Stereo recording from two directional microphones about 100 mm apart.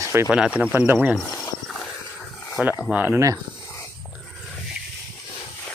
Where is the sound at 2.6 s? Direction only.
10° right (ahead or behind).